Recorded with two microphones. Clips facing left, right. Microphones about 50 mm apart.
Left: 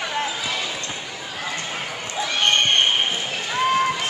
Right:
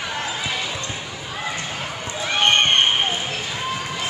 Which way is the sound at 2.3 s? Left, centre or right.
Right.